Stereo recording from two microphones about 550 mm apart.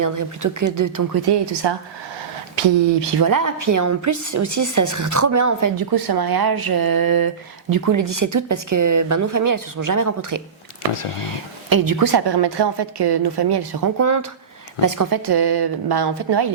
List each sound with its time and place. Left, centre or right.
0.0 s a woman's voice: right
3.2 s a woman's voice: right
11.7 s a woman's voice: right